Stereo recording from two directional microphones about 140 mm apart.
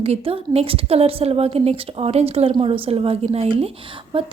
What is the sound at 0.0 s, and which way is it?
A woman's voice, 45° right (ahead or behind).